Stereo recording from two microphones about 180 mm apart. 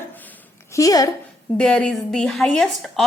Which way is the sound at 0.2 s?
15° left (ahead or behind).